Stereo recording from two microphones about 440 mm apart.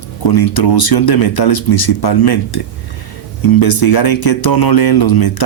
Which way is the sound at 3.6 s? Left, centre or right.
Left.